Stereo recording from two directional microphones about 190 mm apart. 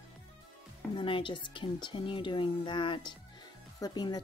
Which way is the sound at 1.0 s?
25° left (ahead or behind).